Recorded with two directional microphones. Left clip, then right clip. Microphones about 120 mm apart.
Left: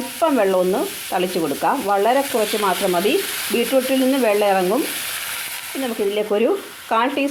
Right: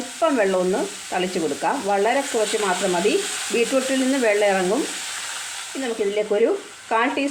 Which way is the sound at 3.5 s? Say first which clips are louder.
Left 2 dB; 40° left (ahead or behind).